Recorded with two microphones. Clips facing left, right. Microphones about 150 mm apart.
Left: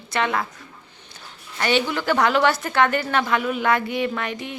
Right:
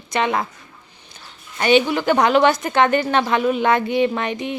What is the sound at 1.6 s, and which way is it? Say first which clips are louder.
A woman's voice: right 6 dB; 20° right (ahead or behind).